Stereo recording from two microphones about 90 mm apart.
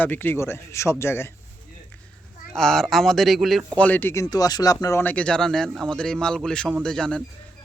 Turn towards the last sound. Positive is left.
turn(degrees=5)  # may be behind; listen again after turning